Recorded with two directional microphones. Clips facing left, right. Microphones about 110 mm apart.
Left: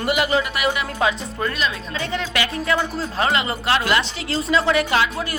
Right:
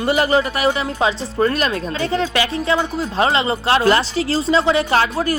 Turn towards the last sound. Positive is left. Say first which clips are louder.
# right 4 dB
turn(degrees=-40)  # may be behind; listen again after turning